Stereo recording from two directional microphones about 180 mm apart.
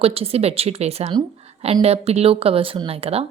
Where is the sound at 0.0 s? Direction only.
35° right (ahead or behind).